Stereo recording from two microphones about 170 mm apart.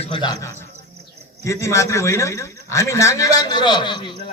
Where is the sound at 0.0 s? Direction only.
30° left (ahead or behind).